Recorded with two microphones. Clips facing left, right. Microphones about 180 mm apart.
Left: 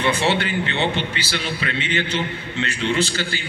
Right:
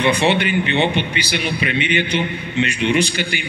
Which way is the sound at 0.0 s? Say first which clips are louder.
Right 4 dB; 15° right (ahead or behind).